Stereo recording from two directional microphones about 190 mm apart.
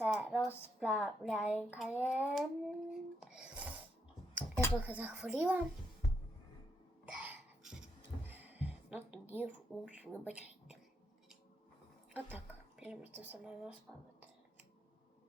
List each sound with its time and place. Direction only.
0.0 s a woman's voice: 5° right (ahead or behind)
7.0 s cough: 5° right (ahead or behind)
8.3 s music: 10° right (ahead or behind)
9.3 s a child's voice: 10° right (ahead or behind)
12.8 s a child's voice: 10° right (ahead or behind)